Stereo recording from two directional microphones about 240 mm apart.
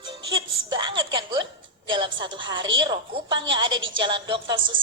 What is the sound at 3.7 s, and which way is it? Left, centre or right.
Speech, right.